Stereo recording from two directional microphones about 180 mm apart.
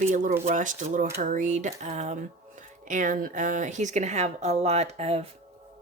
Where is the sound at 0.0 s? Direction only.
45° right (ahead or behind).